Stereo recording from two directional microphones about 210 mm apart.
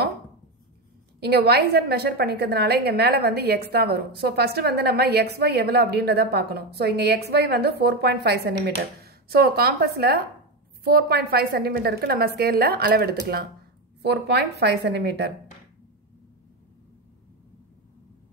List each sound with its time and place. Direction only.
1.2 s a woman's voice: 50° right (ahead or behind)